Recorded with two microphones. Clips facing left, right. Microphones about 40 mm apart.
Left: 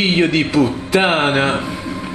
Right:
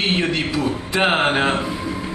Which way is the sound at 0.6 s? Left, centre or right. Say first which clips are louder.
Left 9 dB; left.